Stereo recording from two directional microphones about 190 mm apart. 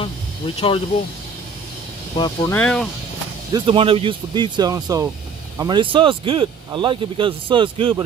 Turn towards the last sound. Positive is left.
turn(degrees=-25)  # may be behind; listen again after turning